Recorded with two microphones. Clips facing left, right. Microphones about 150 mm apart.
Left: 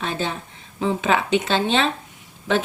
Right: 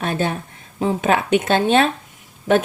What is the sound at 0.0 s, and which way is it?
Speech, 55° right (ahead or behind).